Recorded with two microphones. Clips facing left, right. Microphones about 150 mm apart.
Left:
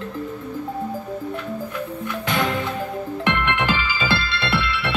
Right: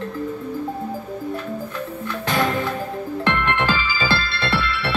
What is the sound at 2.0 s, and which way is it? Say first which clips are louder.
Music: right 2 dB; 20° left (ahead or behind).